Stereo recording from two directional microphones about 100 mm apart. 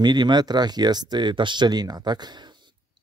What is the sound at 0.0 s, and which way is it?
Speech, 50° right (ahead or behind).